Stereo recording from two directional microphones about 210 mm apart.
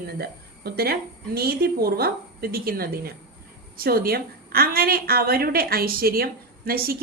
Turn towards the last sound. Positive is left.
turn(degrees=-45)  # may be behind; listen again after turning